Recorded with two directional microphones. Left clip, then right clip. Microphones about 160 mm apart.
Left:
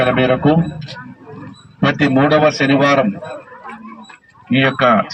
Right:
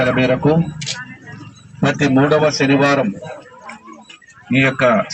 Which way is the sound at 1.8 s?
30° right (ahead or behind).